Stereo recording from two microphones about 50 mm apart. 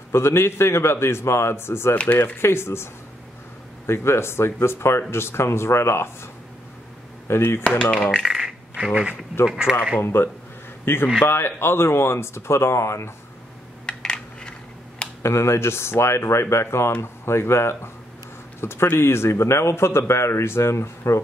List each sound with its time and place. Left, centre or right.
0.1 s speech: left
7.3 s speech: left
7.8 s speech: left
8.2 s coin: centre
9.1 s speech: left
9.5 s speech: centre
10.0 s speech: left
13.8 s coin: centre
15.2 s speech: left